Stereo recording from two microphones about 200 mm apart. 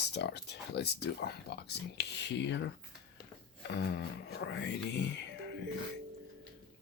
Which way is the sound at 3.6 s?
60° left (ahead or behind).